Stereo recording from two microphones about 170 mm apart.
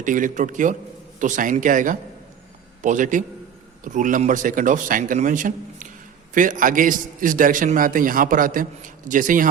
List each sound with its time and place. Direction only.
0.0 s a man's voice: 50° right (ahead or behind)